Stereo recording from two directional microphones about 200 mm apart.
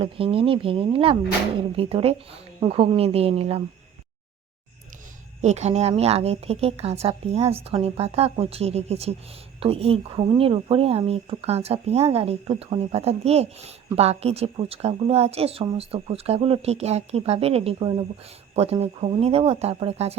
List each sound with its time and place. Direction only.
0.0 s speech: 25° right (ahead or behind)
5.4 s a woman's voice: 35° right (ahead or behind)